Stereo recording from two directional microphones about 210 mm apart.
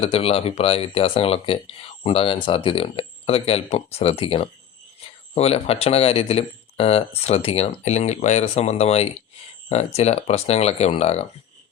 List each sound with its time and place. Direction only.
0.0 s speech: 25° left (ahead or behind)